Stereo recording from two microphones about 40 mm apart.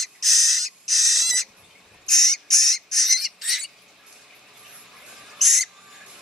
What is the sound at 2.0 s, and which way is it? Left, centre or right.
Bird, centre.